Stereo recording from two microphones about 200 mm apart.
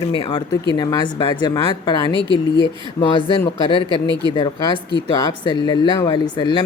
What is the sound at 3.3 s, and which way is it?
Speech, 25° left (ahead or behind).